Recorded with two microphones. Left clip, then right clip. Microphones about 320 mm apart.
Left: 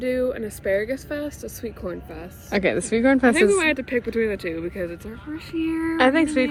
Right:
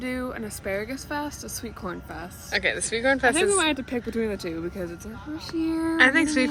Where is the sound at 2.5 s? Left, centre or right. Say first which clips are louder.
Left 3 dB; centre.